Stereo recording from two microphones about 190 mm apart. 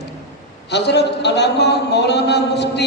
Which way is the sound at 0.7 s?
65° left (ahead or behind).